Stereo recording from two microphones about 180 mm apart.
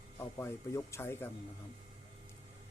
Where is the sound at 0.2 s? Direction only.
15° left (ahead or behind).